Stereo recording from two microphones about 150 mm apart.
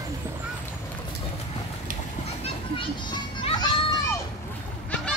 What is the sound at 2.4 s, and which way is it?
Children playing, 40° left (ahead or behind).